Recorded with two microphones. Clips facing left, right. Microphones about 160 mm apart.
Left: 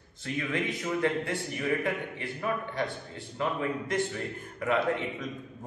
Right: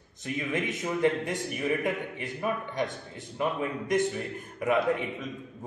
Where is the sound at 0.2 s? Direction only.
20° right (ahead or behind).